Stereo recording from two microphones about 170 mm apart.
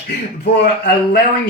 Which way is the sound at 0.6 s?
80° left.